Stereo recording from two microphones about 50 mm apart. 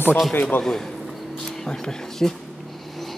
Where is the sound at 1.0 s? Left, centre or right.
Centre.